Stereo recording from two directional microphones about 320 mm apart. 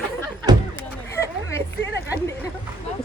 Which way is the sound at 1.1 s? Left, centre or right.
Centre.